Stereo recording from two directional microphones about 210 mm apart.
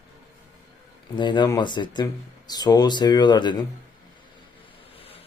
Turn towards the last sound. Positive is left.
turn(degrees=25)  # may be behind; listen again after turning